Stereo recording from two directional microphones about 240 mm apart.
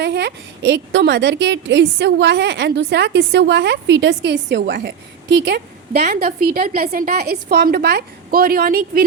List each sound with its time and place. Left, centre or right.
0.0 s a woman's voice: right
6.0 s a woman's voice: right